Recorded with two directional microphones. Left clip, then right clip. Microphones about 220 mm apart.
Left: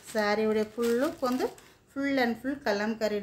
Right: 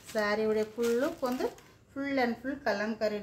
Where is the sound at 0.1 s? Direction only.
35° left (ahead or behind).